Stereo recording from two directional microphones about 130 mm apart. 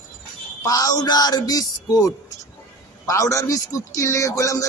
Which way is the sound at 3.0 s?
25° left (ahead or behind).